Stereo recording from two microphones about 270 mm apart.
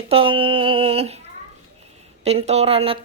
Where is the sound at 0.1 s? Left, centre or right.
Centre.